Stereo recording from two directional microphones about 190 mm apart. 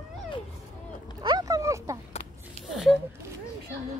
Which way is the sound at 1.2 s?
20° right (ahead or behind).